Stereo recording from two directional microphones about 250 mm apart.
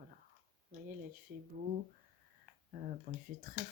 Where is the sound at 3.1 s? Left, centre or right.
Right.